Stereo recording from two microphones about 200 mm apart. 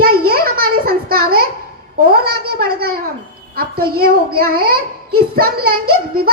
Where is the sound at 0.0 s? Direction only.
50° right (ahead or behind).